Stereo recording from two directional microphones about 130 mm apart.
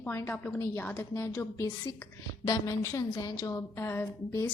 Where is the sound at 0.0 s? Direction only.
20° left (ahead or behind).